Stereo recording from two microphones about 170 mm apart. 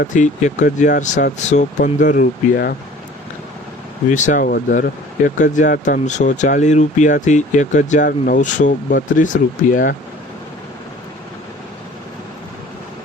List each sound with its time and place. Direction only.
0.1 s speech: 45° left (ahead or behind)
4.1 s speech: 50° left (ahead or behind)